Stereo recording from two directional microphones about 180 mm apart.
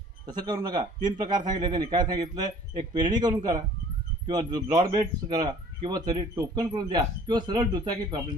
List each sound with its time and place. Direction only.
0.3 s speech: 25° right (ahead or behind)